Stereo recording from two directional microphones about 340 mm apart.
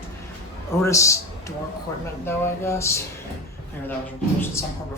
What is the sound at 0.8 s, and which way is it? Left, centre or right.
Speech, centre.